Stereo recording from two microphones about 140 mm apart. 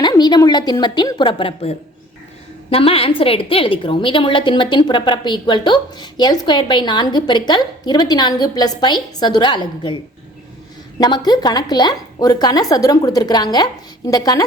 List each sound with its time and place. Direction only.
0.0 s a woman's voice: 30° left (ahead or behind)
11.0 s speech: 30° left (ahead or behind)